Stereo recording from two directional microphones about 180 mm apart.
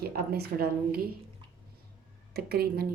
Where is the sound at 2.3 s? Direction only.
60° right (ahead or behind).